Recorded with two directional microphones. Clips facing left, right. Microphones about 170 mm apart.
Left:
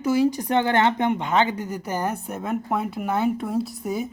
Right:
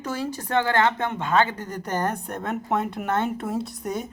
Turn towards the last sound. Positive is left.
turn(degrees=0)  # may be behind; listen again after turning